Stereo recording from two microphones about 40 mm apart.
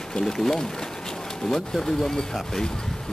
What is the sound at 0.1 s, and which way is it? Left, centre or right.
Speech, centre.